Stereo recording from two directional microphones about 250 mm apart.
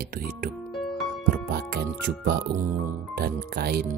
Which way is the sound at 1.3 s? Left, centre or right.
Right.